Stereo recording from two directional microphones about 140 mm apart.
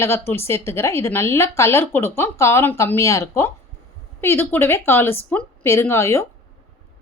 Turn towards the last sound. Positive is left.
turn(degrees=20)  # may be behind; listen again after turning